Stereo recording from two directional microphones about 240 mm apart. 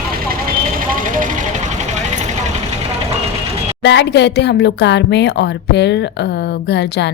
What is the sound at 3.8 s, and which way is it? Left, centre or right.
A woman's voice, left.